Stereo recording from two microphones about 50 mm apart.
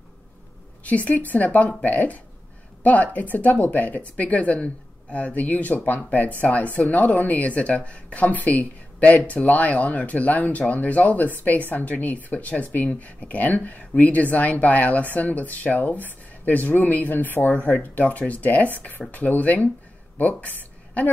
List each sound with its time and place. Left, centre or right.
0.8 s speech: left